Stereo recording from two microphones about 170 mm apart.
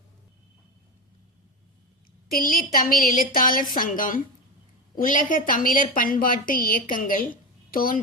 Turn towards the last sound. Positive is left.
turn(degrees=55)  # may be behind; listen again after turning